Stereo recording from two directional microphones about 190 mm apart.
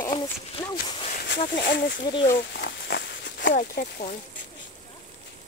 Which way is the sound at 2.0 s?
25° left (ahead or behind).